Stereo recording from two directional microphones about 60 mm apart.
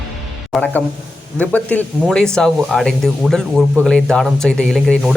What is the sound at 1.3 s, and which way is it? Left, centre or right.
Speech, left.